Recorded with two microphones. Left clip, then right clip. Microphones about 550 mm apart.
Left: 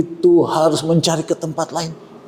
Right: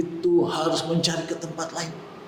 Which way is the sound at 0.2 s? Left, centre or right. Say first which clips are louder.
Left 9 dB; left.